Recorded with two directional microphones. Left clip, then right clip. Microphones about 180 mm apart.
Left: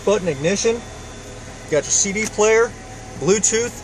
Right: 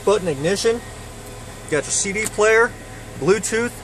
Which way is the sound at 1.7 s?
15° right (ahead or behind).